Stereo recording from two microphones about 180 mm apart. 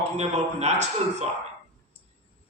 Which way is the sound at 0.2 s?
40° right (ahead or behind).